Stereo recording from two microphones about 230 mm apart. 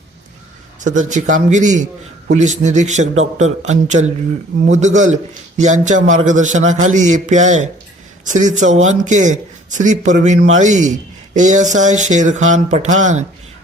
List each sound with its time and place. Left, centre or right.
0.8 s a man's voice: right